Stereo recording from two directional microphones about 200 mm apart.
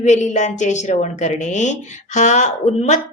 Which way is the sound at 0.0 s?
35° left (ahead or behind).